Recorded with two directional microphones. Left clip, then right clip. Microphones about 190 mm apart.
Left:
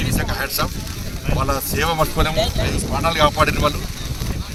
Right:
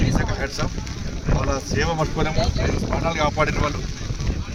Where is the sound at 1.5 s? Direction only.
10° right (ahead or behind).